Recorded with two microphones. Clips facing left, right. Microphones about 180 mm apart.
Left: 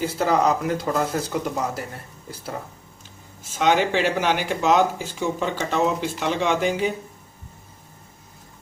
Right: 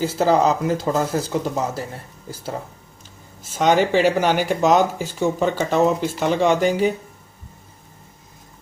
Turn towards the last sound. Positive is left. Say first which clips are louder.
# right 4 dB
turn(degrees=-40)  # may be behind; listen again after turning